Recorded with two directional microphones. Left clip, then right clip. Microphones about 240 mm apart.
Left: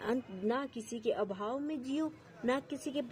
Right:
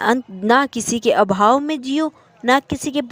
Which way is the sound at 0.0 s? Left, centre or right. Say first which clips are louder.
Right 17 dB; right.